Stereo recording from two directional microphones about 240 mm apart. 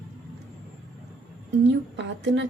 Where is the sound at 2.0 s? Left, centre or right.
Right.